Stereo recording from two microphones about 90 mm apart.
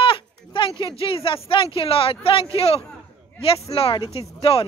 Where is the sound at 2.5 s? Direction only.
90° left.